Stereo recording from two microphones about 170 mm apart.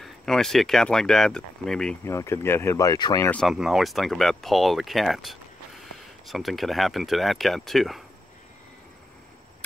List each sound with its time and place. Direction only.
0.0 s speech: centre (ahead or behind)
2.0 s speech: 15° left (ahead or behind)
3.3 s speech: 5° left (ahead or behind)